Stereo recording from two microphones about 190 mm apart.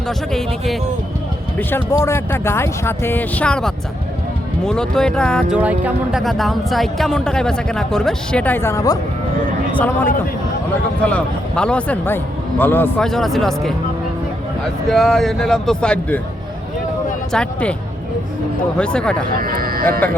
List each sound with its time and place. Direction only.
0.3 s speech: centre (ahead or behind)
1.5 s speech: 15° left (ahead or behind)
5.5 s speech: 5° right (ahead or behind)
14.8 s speech: centre (ahead or behind)
17.3 s speech: 5° left (ahead or behind)
18.8 s speech: 5° left (ahead or behind)
19.4 s speech: 50° right (ahead or behind)
20.0 s speech: 10° left (ahead or behind)